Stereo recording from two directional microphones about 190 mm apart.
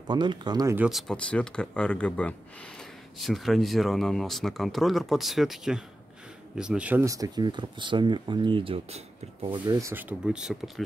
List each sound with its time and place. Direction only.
0.1 s speech: 25° right (ahead or behind)
0.7 s speech: centre (ahead or behind)